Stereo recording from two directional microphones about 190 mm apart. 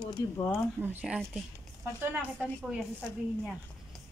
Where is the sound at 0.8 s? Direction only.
10° right (ahead or behind).